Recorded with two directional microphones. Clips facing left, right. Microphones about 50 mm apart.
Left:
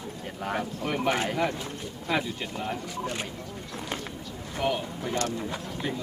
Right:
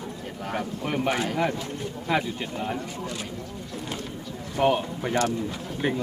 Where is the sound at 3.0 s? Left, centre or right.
Left.